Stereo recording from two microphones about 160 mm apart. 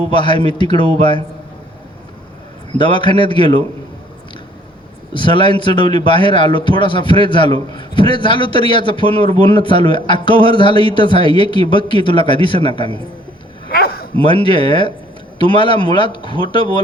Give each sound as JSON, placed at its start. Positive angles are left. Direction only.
{"t": 0.1, "sound": "a man's voice", "side_deg": 30}
{"t": 2.7, "sound": "a man's voice", "side_deg": 30}
{"t": 5.1, "sound": "a man's voice", "side_deg": 30}
{"t": 13.7, "sound": "a sound", "side_deg": 70}
{"t": 14.2, "sound": "a man's voice", "side_deg": 30}